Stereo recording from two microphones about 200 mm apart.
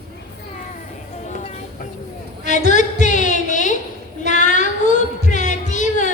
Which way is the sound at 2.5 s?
40° left (ahead or behind).